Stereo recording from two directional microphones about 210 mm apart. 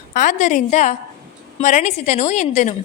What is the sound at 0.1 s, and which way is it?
A woman's voice, 35° left (ahead or behind).